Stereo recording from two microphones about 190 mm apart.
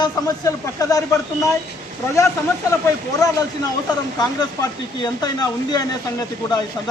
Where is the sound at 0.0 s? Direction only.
20° left (ahead or behind).